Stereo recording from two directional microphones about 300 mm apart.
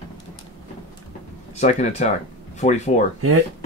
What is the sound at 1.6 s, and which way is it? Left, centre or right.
Speech, left.